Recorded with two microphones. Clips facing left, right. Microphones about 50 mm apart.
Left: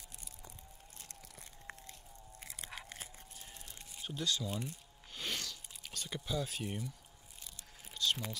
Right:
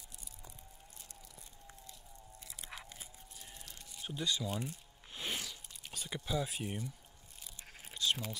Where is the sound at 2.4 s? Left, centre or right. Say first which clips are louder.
Left 2 dB; left.